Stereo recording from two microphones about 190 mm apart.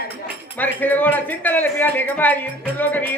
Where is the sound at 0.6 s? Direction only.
10° left (ahead or behind).